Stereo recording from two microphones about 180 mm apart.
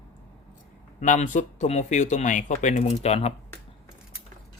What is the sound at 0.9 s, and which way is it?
Speech, 45° left (ahead or behind).